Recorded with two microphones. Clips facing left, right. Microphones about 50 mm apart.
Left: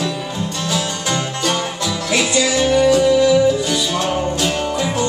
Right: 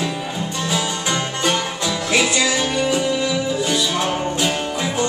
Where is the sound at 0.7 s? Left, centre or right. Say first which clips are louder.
Left 1 dB; centre.